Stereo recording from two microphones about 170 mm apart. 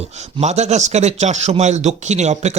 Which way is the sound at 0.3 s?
40° right (ahead or behind).